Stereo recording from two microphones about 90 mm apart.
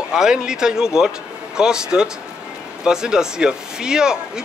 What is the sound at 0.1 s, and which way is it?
Speech, 5° right (ahead or behind).